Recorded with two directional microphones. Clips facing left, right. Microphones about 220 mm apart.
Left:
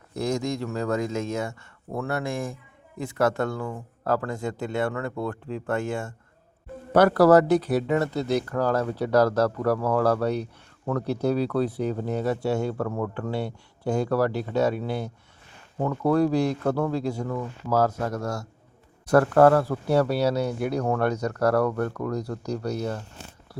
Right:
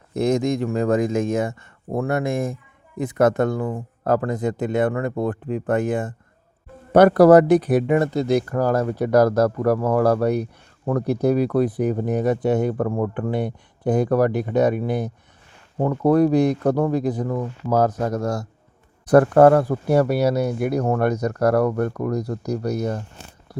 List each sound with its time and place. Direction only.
0.1 s speech: 20° right (ahead or behind)